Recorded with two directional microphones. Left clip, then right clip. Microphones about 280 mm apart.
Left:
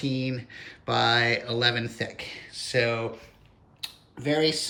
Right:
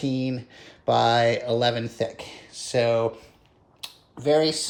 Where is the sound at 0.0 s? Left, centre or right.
Centre.